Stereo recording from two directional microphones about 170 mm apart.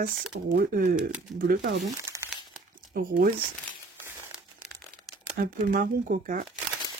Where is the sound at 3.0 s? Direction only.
55° right (ahead or behind).